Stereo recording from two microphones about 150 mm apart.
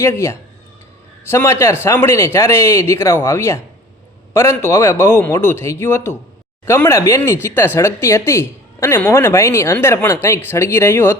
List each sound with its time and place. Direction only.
0.0 s speech: 15° left (ahead or behind)